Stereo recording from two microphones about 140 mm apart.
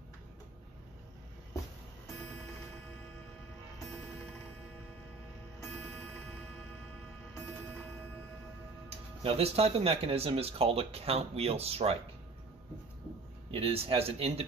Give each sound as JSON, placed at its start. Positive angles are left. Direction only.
{"t": 8.8, "sound": "speech", "side_deg": -45}
{"t": 13.5, "sound": "speech", "side_deg": -40}